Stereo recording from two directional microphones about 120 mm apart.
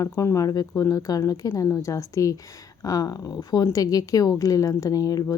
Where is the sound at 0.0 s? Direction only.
25° left (ahead or behind).